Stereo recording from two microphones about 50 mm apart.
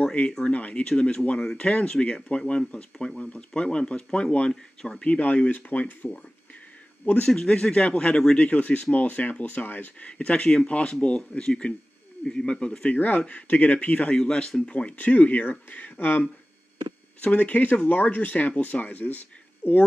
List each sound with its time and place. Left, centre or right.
0.0 s speech: left
5.0 s speech: left
7.4 s speech: left
10.0 s speech: left
13.3 s speech: left